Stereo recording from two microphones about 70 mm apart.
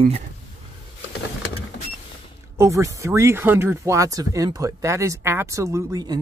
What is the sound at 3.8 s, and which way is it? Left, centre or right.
Speech, right.